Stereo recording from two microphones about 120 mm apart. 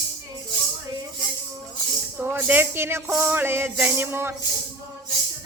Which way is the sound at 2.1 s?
15° right (ahead or behind).